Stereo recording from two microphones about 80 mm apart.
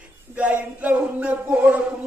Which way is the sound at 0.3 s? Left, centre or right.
Centre.